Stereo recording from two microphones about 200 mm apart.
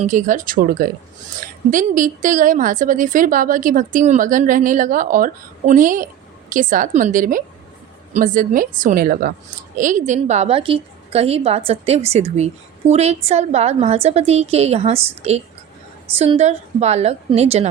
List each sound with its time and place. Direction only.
0.0 s a woman's voice: 40° right (ahead or behind)